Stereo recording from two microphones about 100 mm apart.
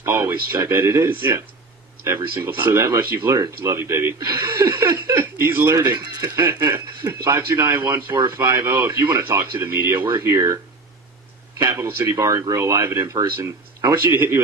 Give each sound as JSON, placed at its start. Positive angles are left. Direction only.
{"t": 0.0, "sound": "speech", "side_deg": -25}
{"t": 6.1, "sound": "speech", "side_deg": -40}
{"t": 6.4, "sound": "speech", "side_deg": -25}
{"t": 11.6, "sound": "speech", "side_deg": -25}
{"t": 14.0, "sound": "speech", "side_deg": -20}